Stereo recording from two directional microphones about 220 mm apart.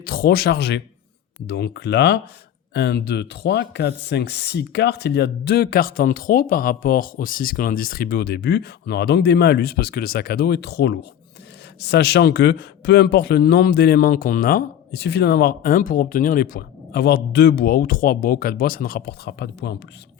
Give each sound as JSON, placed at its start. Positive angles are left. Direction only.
{"t": 0.0, "sound": "speech", "side_deg": 40}